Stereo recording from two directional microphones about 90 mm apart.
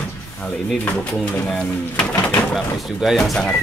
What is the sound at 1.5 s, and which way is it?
Speech, 10° left (ahead or behind).